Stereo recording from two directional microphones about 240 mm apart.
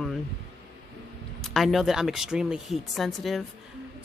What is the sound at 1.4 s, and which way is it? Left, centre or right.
Speech, centre.